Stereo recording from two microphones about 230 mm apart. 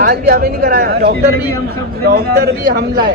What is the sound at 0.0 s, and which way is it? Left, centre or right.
A man's voice, right.